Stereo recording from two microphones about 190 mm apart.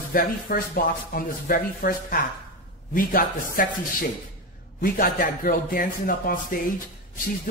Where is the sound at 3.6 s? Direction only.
45° left (ahead or behind).